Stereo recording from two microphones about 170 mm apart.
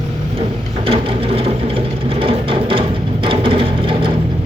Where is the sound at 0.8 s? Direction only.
30° right (ahead or behind).